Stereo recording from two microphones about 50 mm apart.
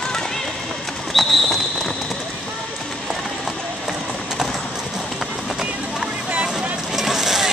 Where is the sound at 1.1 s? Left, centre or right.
Centre.